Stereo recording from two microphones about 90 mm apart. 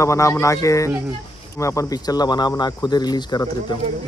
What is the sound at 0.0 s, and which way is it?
Speech, 35° left (ahead or behind).